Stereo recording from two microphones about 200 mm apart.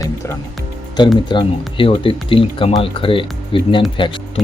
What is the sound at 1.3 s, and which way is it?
Speech, 25° left (ahead or behind).